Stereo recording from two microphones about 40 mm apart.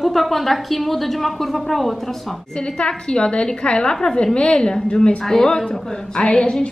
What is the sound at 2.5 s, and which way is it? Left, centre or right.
A woman's voice, left.